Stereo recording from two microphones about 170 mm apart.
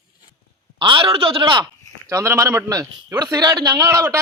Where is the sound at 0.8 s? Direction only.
30° right (ahead or behind).